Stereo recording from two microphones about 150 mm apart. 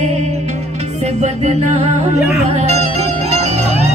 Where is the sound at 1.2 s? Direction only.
45° right (ahead or behind).